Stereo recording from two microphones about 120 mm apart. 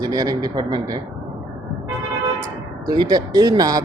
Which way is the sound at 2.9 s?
35° right (ahead or behind).